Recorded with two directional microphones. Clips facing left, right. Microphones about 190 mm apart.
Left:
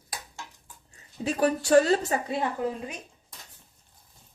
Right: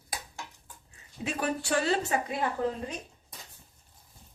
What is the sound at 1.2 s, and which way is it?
Speech, 35° left (ahead or behind).